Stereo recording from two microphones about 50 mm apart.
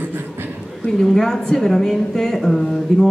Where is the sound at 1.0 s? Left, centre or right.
Centre.